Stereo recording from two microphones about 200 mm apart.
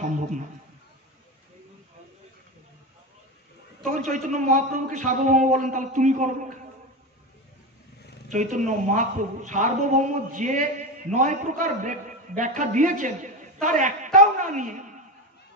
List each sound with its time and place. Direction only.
3.8 s a woman's voice: 40° right (ahead or behind)
8.3 s a woman's voice: 40° right (ahead or behind)